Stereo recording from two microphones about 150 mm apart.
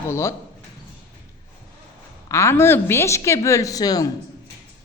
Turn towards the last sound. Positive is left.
turn(degrees=25)  # may be behind; listen again after turning